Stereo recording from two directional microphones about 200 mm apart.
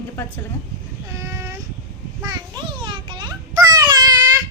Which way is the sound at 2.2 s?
20° right (ahead or behind).